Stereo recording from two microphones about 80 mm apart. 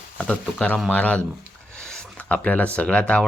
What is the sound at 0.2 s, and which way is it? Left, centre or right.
Speech, centre.